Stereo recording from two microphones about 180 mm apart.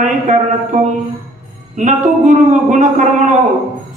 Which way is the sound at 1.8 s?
40° right (ahead or behind).